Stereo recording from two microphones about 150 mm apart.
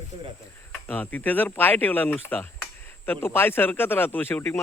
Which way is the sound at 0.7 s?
10° left (ahead or behind).